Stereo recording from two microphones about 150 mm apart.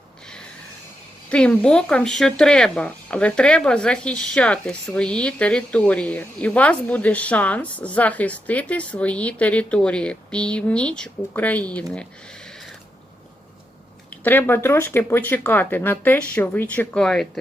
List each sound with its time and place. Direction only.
1.3 s speech: 5° left (ahead or behind)
14.3 s speech: 15° left (ahead or behind)